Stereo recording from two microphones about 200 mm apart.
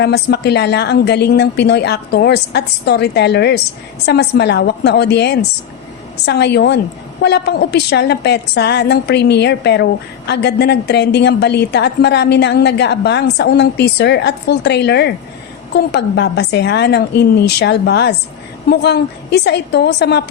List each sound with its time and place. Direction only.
0.0 s a woman's voice: 55° left (ahead or behind)